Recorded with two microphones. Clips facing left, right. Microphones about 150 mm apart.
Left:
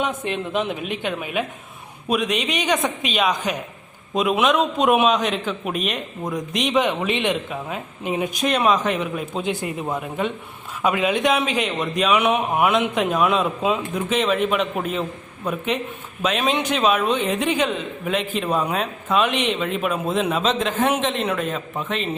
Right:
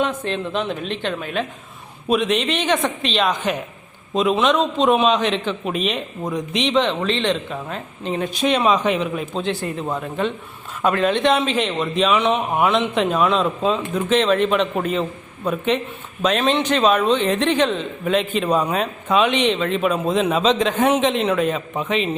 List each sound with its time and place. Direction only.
0.0 s a man's voice: 10° left (ahead or behind)